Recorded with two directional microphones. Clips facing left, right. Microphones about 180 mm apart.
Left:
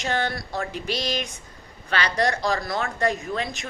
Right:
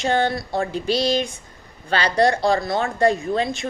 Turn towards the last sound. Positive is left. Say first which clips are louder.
# right 6 dB
turn(degrees=-30)  # may be behind; listen again after turning